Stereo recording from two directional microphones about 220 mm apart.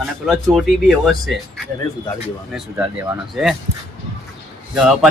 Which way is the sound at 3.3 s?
Centre (ahead or behind).